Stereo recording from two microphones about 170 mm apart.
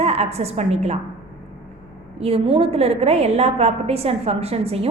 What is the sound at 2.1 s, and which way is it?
A woman's voice, 35° right (ahead or behind).